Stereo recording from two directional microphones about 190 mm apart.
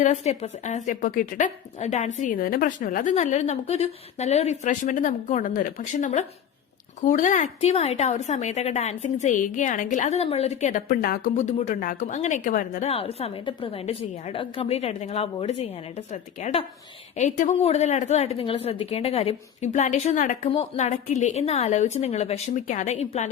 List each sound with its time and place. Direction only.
0.0 s a woman's voice: 35° left (ahead or behind)
12.9 s a woman's voice: 30° left (ahead or behind)